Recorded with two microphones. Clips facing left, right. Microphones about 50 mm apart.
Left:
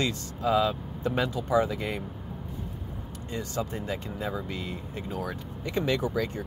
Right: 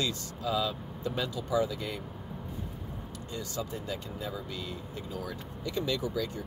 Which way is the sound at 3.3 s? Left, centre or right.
Left.